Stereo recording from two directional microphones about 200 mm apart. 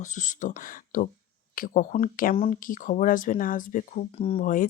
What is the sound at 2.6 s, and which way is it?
Speech, 40° left (ahead or behind).